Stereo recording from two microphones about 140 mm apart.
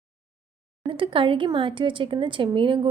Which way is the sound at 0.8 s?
40° right (ahead or behind).